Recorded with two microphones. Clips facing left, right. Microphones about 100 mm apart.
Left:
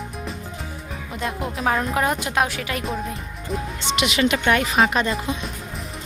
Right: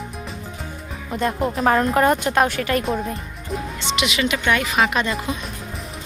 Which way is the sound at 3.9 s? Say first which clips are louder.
Left 2 dB; 45° left (ahead or behind).